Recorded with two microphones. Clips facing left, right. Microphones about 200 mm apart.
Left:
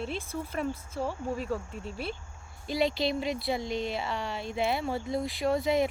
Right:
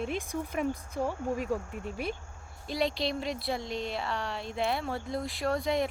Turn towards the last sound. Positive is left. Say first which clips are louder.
# left 3 dB
turn(degrees=0)  # may be behind; listen again after turning